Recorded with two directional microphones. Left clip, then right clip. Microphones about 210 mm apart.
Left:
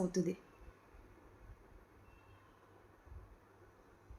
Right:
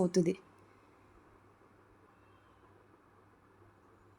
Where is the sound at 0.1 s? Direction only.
45° right (ahead or behind).